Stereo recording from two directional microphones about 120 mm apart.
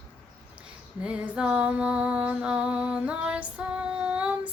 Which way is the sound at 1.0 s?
10° right (ahead or behind).